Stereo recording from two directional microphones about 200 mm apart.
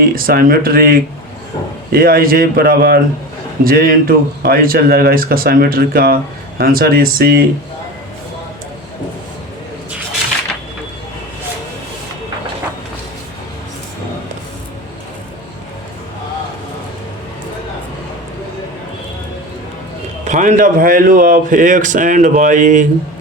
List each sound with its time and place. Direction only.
0.0 s speech: 50° right (ahead or behind)
20.2 s speech: 40° right (ahead or behind)